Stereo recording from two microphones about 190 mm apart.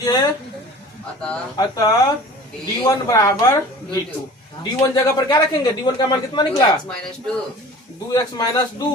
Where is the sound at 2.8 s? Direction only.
15° left (ahead or behind).